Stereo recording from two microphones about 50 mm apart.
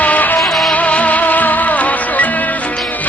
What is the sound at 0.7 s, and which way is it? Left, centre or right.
Music, left.